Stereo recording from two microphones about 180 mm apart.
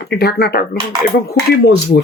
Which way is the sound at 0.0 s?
65° left (ahead or behind).